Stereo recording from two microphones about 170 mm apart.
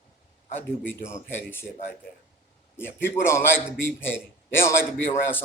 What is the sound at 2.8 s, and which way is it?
A man's voice, 10° left (ahead or behind).